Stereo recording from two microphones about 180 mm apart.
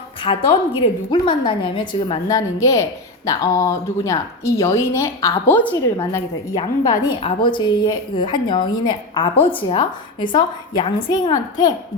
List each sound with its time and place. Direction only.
0.2 s a woman's voice: 30° left (ahead or behind)